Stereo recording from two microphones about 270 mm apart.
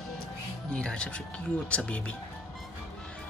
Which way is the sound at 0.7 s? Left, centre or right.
Centre.